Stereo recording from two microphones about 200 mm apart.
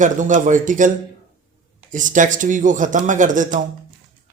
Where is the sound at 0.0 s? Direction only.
40° right (ahead or behind).